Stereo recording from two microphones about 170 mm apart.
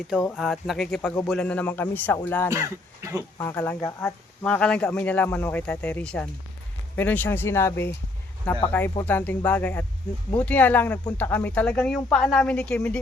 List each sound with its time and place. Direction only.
0.1 s speech: 5° right (ahead or behind)
2.5 s speech: 20° right (ahead or behind)
3.3 s speech: 15° left (ahead or behind)